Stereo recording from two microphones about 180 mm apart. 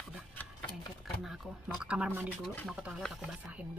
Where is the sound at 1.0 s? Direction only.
Centre (ahead or behind).